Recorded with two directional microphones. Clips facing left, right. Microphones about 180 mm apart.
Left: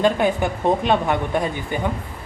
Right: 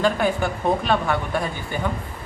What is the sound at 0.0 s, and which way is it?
Speech, 20° left (ahead or behind).